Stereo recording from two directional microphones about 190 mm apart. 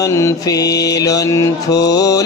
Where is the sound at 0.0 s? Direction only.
15° left (ahead or behind).